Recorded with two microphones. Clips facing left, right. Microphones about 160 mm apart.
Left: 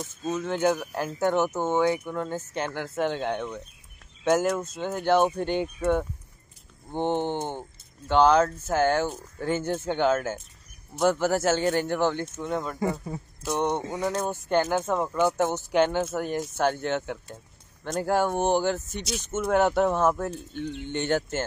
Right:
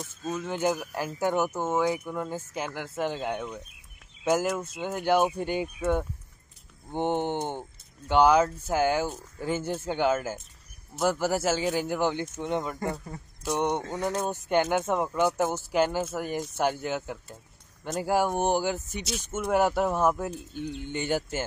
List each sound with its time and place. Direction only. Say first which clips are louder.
0.0 s speech: left 3 dB; centre (ahead or behind); by 12.7 s 20° right (ahead or behind)
13.0 s speech: left 2 dB; 5° left (ahead or behind)
13.7 s a sound: left 1 dB; 10° left (ahead or behind)
14.3 s speech: right 1 dB; 15° right (ahead or behind)